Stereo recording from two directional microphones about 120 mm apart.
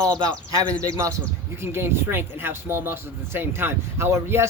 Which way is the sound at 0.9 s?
25° right (ahead or behind).